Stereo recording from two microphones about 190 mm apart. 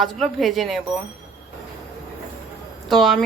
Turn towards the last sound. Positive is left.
turn(degrees=0)  # may be behind; listen again after turning